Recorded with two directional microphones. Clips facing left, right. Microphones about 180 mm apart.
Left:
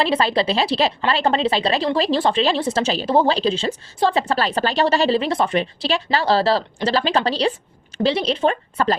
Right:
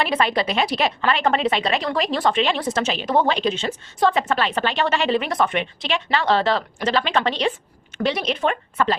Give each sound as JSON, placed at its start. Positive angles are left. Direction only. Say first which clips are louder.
{"t": 0.0, "sound": "a woman's voice", "louder": "left 2 dB", "side_deg": 30}